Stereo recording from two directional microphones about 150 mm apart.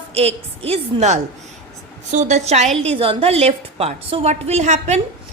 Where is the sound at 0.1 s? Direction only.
40° right (ahead or behind).